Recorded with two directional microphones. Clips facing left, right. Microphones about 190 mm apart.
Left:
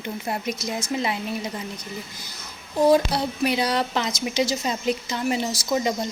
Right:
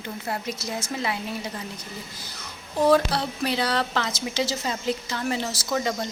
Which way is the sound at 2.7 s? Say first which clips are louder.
Left 2 dB; 15° left (ahead or behind).